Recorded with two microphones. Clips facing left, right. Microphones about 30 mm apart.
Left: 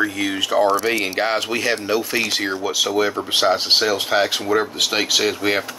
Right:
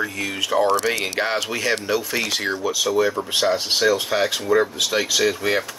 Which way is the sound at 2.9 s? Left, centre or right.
Left.